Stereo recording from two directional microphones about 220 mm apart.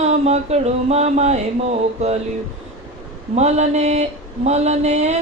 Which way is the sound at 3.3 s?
30° right (ahead or behind).